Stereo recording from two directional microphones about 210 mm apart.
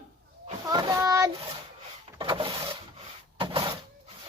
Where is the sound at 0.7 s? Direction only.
20° right (ahead or behind).